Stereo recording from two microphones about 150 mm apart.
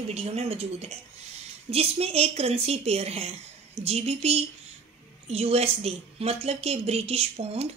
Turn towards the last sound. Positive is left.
turn(degrees=-40)  # may be behind; listen again after turning